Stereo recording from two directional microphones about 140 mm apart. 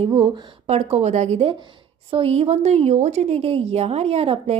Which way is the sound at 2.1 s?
45° right (ahead or behind).